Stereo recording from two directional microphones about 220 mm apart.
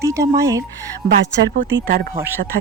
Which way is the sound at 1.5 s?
45° right (ahead or behind).